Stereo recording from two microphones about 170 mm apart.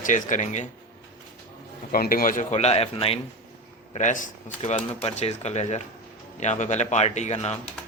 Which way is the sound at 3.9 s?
50° left (ahead or behind).